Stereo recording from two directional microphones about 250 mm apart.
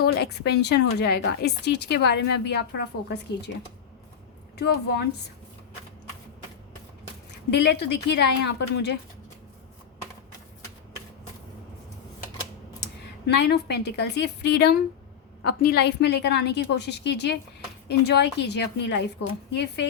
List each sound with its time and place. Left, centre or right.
0.0 s a woman's voice: left
4.5 s a woman's voice: left
7.3 s a woman's voice: left
12.8 s a woman's voice: left
19.2 s a woman's voice: left
19.5 s a woman's voice: left